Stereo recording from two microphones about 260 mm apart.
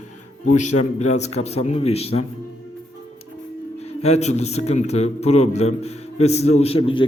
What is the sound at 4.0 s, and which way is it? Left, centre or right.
A man's voice, left.